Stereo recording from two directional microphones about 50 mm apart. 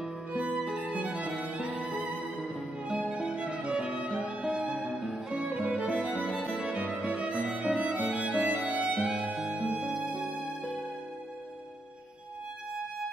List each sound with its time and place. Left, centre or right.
0.3 s music: right
2.2 s music: centre